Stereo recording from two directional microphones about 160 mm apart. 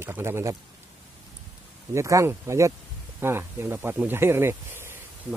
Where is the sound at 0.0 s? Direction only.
15° right (ahead or behind).